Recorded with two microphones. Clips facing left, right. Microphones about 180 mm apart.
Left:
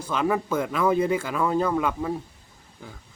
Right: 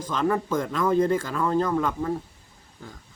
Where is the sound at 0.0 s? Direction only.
10° left (ahead or behind).